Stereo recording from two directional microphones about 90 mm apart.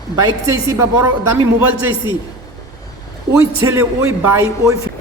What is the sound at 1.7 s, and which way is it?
Speech, 75° left (ahead or behind).